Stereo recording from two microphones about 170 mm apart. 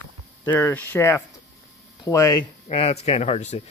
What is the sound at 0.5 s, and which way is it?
Speech, 10° left (ahead or behind).